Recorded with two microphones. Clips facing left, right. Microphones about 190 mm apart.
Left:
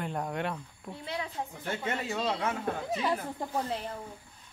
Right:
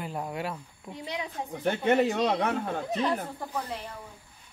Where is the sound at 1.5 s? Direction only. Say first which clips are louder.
Right 12 dB; 70° right (ahead or behind).